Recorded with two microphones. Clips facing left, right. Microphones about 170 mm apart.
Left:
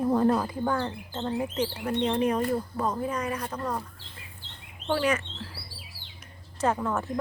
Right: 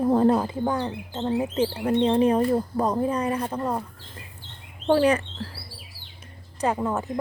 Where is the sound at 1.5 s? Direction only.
25° right (ahead or behind).